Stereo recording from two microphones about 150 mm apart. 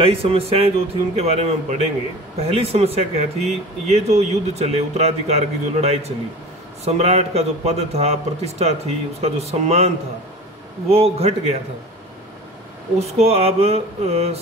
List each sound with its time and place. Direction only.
0.0 s a man's voice: 40° right (ahead or behind)
13.0 s speech: 45° right (ahead or behind)